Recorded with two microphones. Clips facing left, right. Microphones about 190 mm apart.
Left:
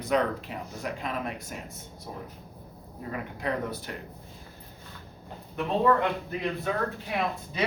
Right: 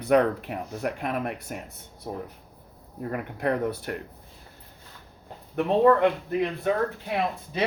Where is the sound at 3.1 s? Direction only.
60° right (ahead or behind).